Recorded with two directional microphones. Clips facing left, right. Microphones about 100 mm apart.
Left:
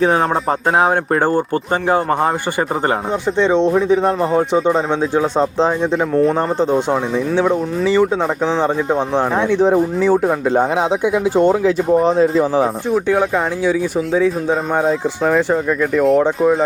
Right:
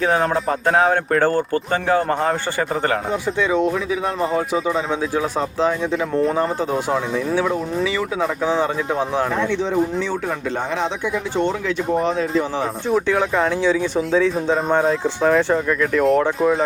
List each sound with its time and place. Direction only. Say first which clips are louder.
0.8 s speech: left 1 dB; 20° left (ahead or behind)
3.3 s speech: left 6 dB; 25° left (ahead or behind)
9.6 s speech: left 6 dB; 45° left (ahead or behind)
13.1 s speech: left 2 dB; 10° left (ahead or behind)